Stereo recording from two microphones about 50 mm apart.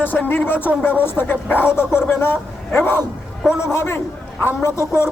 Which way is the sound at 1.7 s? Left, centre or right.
Left.